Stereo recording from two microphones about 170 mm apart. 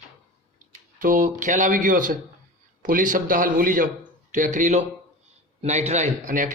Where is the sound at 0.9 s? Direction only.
50° right (ahead or behind).